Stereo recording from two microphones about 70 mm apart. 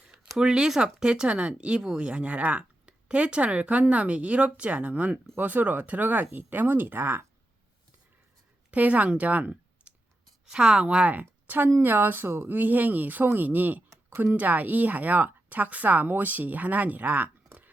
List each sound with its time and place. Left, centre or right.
0.3 s speech: centre; by 7.3 s right
8.7 s speech: right